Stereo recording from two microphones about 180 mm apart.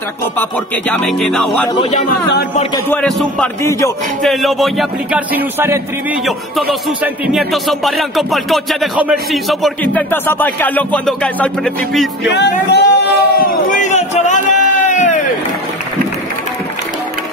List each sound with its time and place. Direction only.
0.4 s speech: 5° left (ahead or behind)
1.8 s a man's voice: 40° left (ahead or behind)
2.9 s speech: 5° left (ahead or behind); by 5.8 s 10° right (ahead or behind)
6.2 s speech: centre (ahead or behind)
10.1 s speech: 10° left (ahead or behind)
12.3 s a sound: 70° left (ahead or behind); by 15.2 s 40° left (ahead or behind)